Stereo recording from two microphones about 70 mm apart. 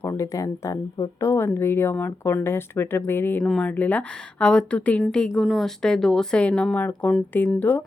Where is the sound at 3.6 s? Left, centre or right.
Left.